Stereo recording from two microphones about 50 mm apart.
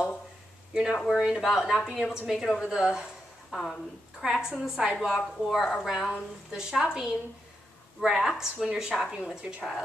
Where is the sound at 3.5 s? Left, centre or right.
Centre.